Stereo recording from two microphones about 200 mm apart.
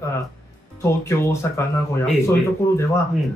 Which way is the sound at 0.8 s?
15° left (ahead or behind).